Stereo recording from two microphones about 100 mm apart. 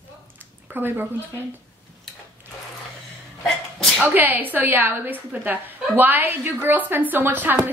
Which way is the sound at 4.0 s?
20° right (ahead or behind).